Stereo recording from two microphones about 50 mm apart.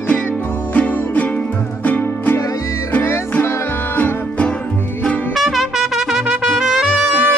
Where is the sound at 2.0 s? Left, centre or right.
Left.